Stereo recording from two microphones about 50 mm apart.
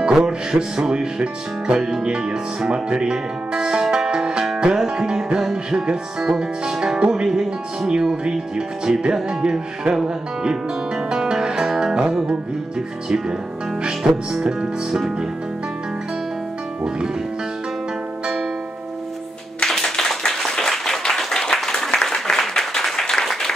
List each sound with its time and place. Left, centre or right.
0.0 s speech: centre
2.0 s speech: centre
11.1 s guitar: centre
11.8 s music: centre
13.8 s speech: centre
19.8 s a sound: centre
22.8 s applause: centre